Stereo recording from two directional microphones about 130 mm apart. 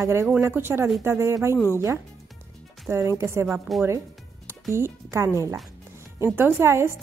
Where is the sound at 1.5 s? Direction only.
20° left (ahead or behind).